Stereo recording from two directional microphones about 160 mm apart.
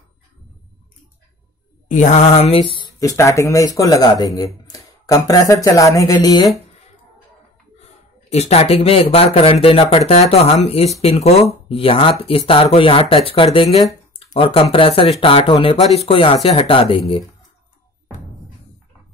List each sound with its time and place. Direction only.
1.9 s speech: 50° left (ahead or behind)
3.0 s speech: 20° left (ahead or behind)
8.3 s speech: 40° left (ahead or behind)